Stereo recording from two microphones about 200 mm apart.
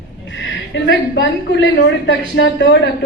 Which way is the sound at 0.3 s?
65° left (ahead or behind).